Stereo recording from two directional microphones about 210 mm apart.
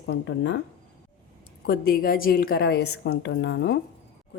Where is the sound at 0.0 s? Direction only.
55° left (ahead or behind).